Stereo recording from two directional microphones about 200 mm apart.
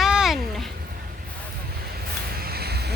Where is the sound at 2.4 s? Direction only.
50° right (ahead or behind).